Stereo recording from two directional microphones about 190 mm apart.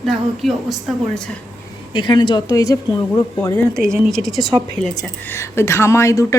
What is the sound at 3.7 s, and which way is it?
Speech, 5° left (ahead or behind).